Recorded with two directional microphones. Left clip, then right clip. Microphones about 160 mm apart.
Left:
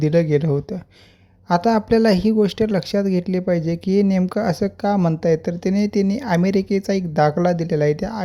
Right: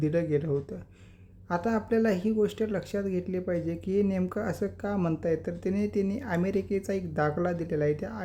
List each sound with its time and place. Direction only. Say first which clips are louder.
0.0 s speech: left 10 dB; 30° left (ahead or behind)